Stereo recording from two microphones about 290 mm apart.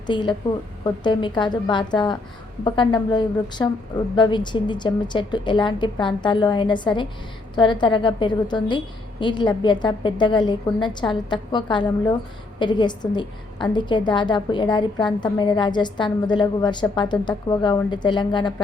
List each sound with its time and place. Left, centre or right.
0.1 s a woman's voice: centre